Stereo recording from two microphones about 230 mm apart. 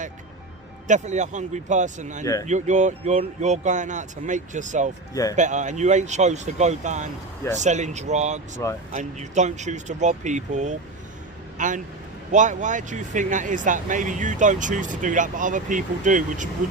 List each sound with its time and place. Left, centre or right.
0.9 s speech: right